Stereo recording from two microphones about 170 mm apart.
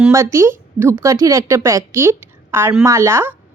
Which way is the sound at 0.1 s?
15° right (ahead or behind).